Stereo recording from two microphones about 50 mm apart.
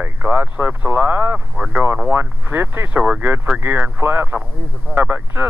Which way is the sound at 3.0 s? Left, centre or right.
Right.